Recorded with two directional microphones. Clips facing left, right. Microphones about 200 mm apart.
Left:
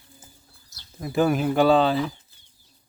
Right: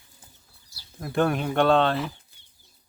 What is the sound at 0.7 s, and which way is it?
Speech, centre (ahead or behind).